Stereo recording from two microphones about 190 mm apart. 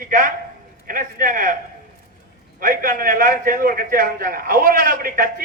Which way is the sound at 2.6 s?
45° right (ahead or behind).